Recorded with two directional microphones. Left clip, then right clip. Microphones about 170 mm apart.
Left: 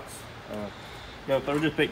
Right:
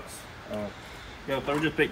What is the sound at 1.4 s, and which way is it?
Speech, 35° left (ahead or behind).